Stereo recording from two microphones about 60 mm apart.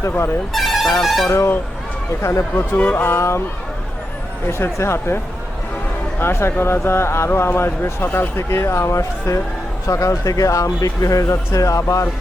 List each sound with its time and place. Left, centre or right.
0.5 s speech: centre
2.2 s speech: left
2.7 s speech: left
3.1 s speech: left
4.4 s speech: left